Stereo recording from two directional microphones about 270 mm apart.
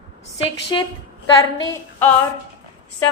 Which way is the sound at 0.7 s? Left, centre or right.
Centre.